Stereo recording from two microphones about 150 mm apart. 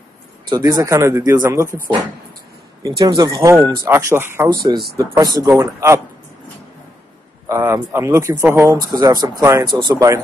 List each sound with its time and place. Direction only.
0.5 s speech: 25° right (ahead or behind)
3.0 s speech: 25° right (ahead or behind)
7.4 s speech: 15° right (ahead or behind)